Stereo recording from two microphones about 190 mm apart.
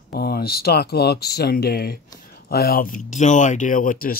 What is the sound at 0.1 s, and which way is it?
Speech, 55° left (ahead or behind).